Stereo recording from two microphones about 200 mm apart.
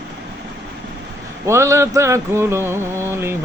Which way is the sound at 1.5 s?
15° right (ahead or behind).